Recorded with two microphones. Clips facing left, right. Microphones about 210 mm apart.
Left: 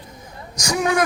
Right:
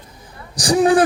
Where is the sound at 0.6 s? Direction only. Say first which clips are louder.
Right 7 dB; 35° right (ahead or behind).